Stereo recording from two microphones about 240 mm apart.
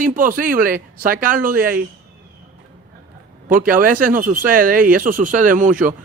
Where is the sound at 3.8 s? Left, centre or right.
Right.